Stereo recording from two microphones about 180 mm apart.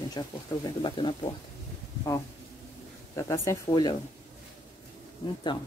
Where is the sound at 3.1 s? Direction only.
15° left (ahead or behind).